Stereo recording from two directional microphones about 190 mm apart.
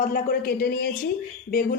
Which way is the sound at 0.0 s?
50° left (ahead or behind).